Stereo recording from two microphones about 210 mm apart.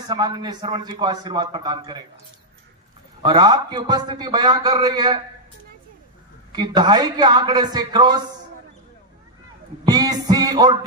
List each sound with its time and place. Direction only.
0.0 s a man's voice: 20° right (ahead or behind)
3.2 s a man's voice: 20° right (ahead or behind)
6.5 s a man's voice: 20° right (ahead or behind)
9.8 s music: 15° right (ahead or behind)